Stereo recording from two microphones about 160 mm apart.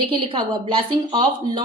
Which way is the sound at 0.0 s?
30° right (ahead or behind).